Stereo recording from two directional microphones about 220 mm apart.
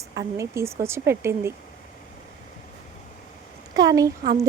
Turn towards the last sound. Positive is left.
turn(degrees=-15)  # may be behind; listen again after turning